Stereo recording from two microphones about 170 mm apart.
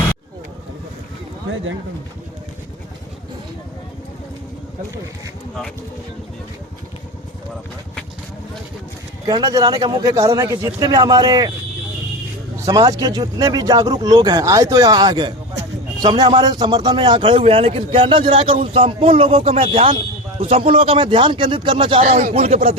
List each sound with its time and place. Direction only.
9.2 s speech: 25° right (ahead or behind)
12.6 s a man's voice: 20° right (ahead or behind)
22.1 s a man's voice: 45° right (ahead or behind)